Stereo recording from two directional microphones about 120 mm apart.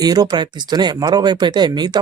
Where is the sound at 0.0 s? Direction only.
35° right (ahead or behind).